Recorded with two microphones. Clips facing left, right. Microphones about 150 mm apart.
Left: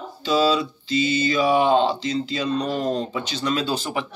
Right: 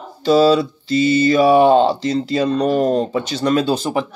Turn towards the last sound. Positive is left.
turn(degrees=-40)  # may be behind; listen again after turning